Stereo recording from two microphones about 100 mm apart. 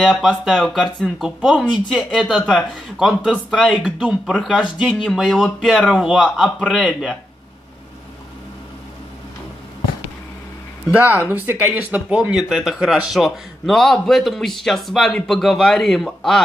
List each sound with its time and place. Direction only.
0.0 s speech: centre (ahead or behind)
10.9 s speech: 15° right (ahead or behind); by 16.4 s centre (ahead or behind)